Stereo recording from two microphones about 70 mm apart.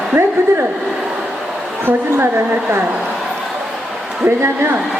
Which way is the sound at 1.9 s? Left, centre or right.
Right.